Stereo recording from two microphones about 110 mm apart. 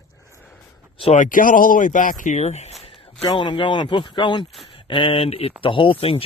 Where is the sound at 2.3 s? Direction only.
90° left.